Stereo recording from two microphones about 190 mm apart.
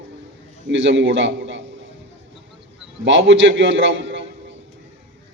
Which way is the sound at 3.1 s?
75° right (ahead or behind).